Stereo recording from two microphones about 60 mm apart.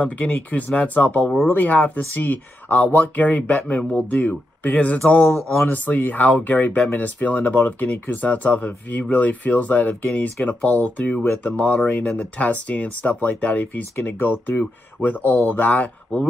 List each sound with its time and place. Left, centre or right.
0.0 s speech: left